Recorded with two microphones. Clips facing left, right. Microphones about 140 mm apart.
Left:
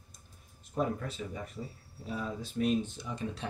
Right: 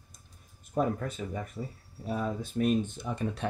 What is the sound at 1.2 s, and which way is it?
Speech, 50° right (ahead or behind).